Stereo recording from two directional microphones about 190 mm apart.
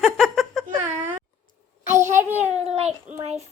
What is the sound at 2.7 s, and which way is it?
Child singing, 35° right (ahead or behind).